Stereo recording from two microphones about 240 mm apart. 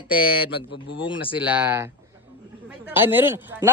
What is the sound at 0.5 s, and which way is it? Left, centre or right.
Speech, left.